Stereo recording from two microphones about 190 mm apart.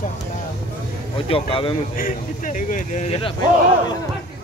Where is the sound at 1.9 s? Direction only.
45° left (ahead or behind).